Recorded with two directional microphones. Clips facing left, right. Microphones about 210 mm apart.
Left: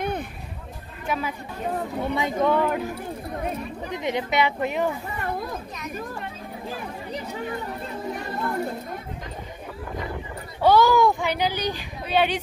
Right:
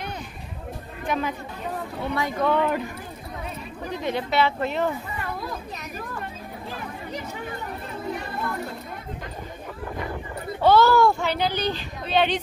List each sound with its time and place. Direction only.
1.0 s speech: 5° left (ahead or behind)
2.1 s speech: 20° left (ahead or behind)
2.5 s speech: 5° left (ahead or behind)
3.9 s speech: 20° left (ahead or behind)
10.6 s speech: 15° left (ahead or behind)